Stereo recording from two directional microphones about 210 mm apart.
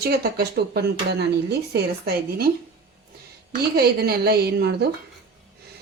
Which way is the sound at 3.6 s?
50° right (ahead or behind).